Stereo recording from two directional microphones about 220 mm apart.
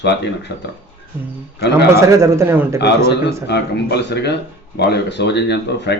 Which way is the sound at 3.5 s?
50° left (ahead or behind).